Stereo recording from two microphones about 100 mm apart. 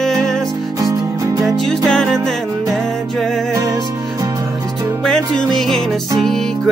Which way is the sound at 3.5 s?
35° right (ahead or behind).